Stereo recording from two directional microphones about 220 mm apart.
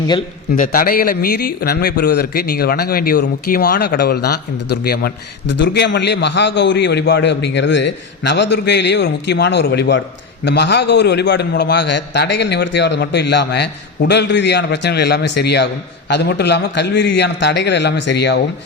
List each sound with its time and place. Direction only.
0.5 s a man's voice: 40° left (ahead or behind)